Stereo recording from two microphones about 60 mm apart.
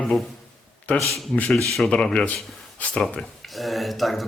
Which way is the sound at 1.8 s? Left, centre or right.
Centre.